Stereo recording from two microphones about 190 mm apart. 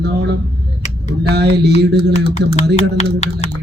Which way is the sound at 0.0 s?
60° right (ahead or behind).